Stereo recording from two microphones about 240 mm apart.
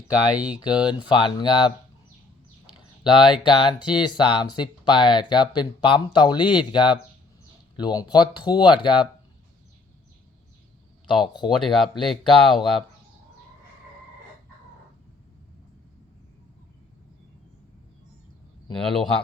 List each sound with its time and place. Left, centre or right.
0.3 s speech: centre
0.6 s speech: centre
11.0 s speech: centre
11.5 s speech: centre
18.8 s speech: centre